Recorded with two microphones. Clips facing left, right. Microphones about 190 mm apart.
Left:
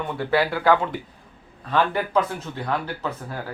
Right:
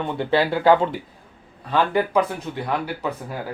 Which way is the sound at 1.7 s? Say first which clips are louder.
Right 2 dB; 15° right (ahead or behind).